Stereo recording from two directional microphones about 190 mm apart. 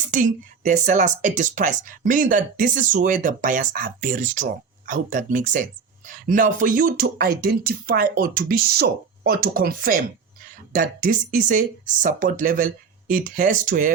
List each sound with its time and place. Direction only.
0.1 s speech: 40° right (ahead or behind)